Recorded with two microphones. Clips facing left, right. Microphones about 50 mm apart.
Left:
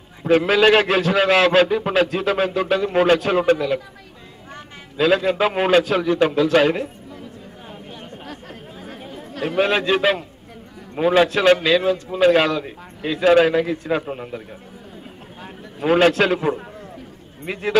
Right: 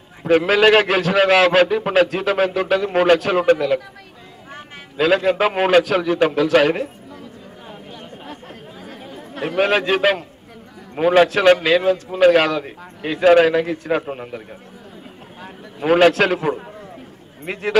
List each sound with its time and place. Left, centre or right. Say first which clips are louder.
0.2 s a man's voice: right 1 dB; centre
4.5 s a sound: right 2 dB; right
5.0 s a man's voice: right 1 dB; centre
9.3 s chatter: even; right
9.6 s a man's voice: right 1 dB; centre
12.5 s a man's voice: right 1 dB; centre
15.9 s a man's voice: right 2 dB; centre